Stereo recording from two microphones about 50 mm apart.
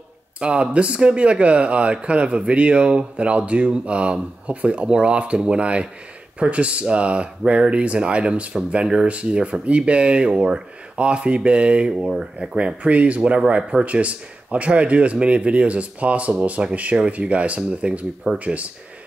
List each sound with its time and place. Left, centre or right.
0.4 s speech: right
11.9 s speech: centre
12.5 s speech: right